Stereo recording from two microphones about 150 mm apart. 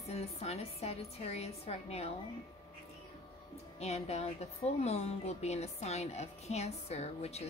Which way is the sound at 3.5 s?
45° left (ahead or behind).